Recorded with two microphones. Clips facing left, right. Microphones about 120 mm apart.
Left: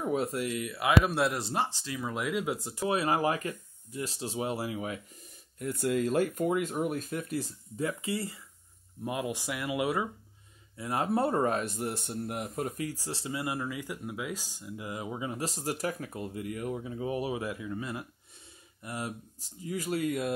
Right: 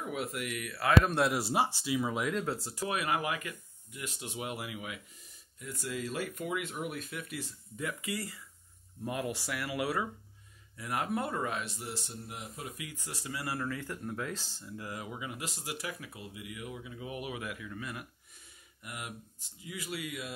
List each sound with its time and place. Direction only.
0.0 s speech: 35° left (ahead or behind)
1.0 s speech: centre (ahead or behind)
2.4 s speech: 15° left (ahead or behind); by 5.0 s 35° left (ahead or behind)
5.6 s a man's voice: 55° left (ahead or behind)
12.5 s a man's voice: 45° left (ahead or behind)